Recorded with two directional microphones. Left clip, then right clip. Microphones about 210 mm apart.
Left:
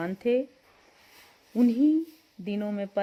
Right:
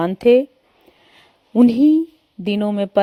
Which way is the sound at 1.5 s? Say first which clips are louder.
Right 10 dB; 30° right (ahead or behind).